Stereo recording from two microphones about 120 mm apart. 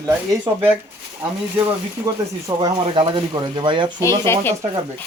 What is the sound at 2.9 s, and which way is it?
Speech, 45° right (ahead or behind).